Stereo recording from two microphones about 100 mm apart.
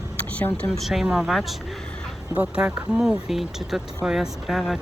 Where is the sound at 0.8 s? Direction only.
Centre (ahead or behind).